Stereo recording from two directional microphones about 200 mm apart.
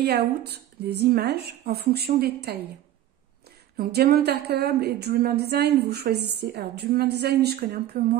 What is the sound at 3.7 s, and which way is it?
A woman's voice, 50° right (ahead or behind).